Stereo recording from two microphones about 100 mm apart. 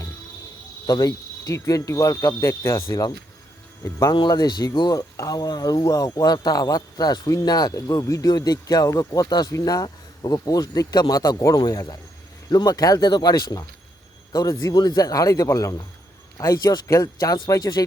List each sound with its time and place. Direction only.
0.9 s speech: 40° left (ahead or behind)
4.1 s speech: 45° left (ahead or behind)